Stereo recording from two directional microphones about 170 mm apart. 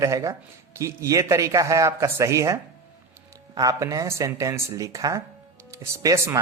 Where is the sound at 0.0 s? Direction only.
20° right (ahead or behind).